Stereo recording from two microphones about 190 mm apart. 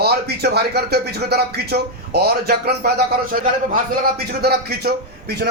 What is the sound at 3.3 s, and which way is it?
Speech, 45° right (ahead or behind).